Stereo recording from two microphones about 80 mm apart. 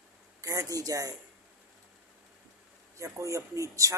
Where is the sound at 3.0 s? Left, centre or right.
Right.